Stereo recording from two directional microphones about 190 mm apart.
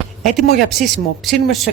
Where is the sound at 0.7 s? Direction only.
Centre (ahead or behind).